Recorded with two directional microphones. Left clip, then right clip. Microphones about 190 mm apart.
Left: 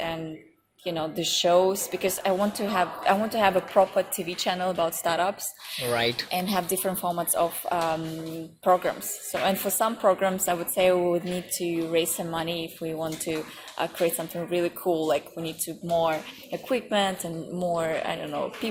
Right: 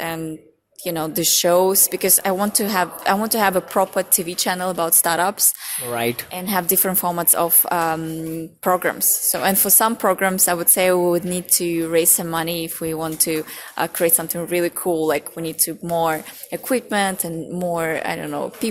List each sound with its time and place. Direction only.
0.9 s a woman's voice: 55° right (ahead or behind)
5.9 s a woman's voice: 40° right (ahead or behind)